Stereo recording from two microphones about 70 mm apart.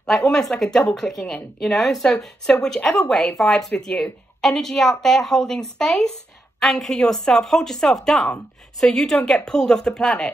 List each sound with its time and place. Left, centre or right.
0.0 s speech: centre